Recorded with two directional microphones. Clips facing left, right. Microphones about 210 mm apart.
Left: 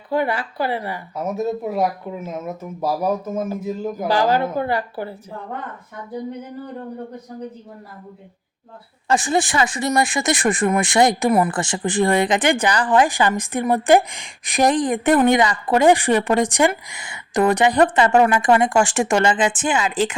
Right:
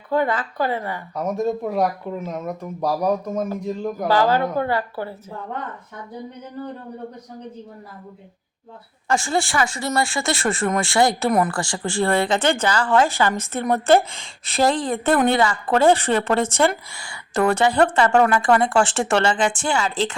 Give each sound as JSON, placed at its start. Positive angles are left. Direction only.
{"t": 0.1, "sound": "a woman's voice", "side_deg": 15}
{"t": 4.1, "sound": "a woman's voice", "side_deg": 15}
{"t": 9.0, "sound": "a woman's voice", "side_deg": 20}
{"t": 11.3, "sound": "speech", "side_deg": 5}
{"t": 11.5, "sound": "a woman's voice", "side_deg": 20}